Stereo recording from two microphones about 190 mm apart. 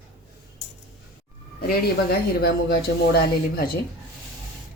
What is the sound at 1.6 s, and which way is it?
Speech, 55° left (ahead or behind).